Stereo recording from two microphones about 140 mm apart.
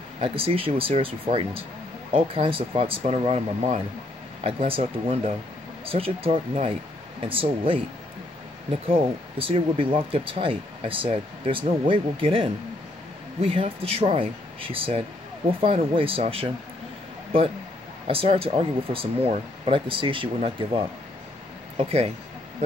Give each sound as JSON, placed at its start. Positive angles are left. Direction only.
{"t": 0.2, "sound": "speech", "side_deg": -40}
{"t": 9.4, "sound": "speech", "side_deg": -40}
{"t": 18.0, "sound": "speech", "side_deg": -40}
{"t": 21.7, "sound": "speech", "side_deg": -45}